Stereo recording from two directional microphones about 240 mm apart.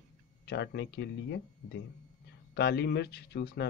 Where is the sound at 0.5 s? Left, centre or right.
Left.